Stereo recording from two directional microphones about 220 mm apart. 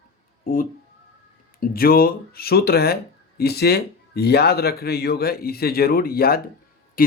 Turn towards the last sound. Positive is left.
turn(degrees=45)  # may be behind; listen again after turning